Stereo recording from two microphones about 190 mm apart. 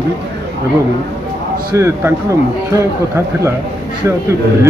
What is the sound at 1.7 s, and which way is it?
Speech, 15° right (ahead or behind).